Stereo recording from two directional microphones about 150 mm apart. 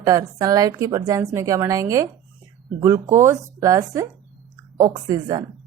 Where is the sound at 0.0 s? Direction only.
25° right (ahead or behind).